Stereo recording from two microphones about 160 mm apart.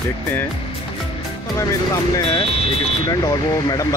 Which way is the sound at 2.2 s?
30° left (ahead or behind).